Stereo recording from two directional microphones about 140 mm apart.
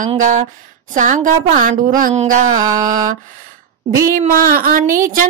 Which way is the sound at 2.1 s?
60° right (ahead or behind).